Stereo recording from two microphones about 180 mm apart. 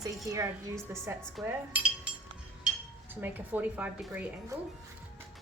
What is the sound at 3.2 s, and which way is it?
A woman's voice, 10° right (ahead or behind).